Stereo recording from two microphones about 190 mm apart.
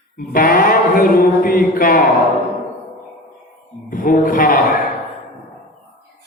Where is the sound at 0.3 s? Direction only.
45° left (ahead or behind).